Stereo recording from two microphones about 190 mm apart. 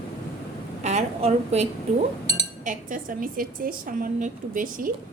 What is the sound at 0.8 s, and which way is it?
A woman's voice, 35° right (ahead or behind).